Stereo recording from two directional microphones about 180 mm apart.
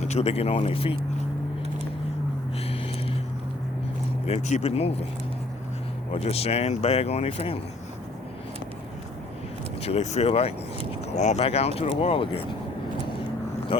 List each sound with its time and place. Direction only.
0.0 s speech: 40° left (ahead or behind)
4.3 s speech: 40° left (ahead or behind)
6.1 s speech: 35° left (ahead or behind)
9.8 s speech: 35° left (ahead or behind)